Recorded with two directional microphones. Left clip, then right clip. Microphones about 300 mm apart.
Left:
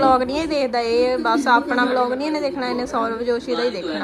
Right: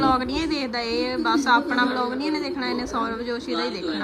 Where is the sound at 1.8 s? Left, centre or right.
Centre.